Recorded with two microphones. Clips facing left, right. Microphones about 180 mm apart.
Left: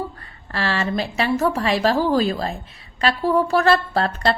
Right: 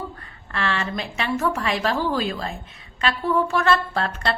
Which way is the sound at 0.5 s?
35° left (ahead or behind).